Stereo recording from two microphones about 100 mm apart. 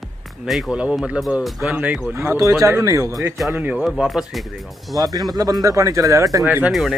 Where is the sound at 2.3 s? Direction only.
35° right (ahead or behind).